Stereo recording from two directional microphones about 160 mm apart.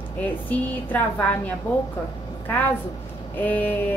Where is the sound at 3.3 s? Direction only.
10° left (ahead or behind).